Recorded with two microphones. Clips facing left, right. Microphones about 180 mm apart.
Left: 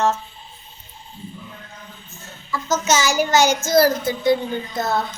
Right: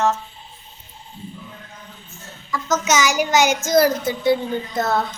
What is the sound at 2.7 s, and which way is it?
A child's voice, 15° right (ahead or behind).